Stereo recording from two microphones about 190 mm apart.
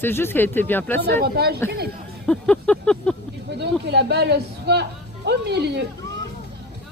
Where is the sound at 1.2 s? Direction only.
55° right (ahead or behind).